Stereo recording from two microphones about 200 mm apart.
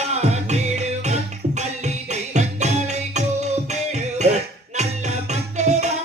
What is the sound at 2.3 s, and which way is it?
Music, 35° right (ahead or behind).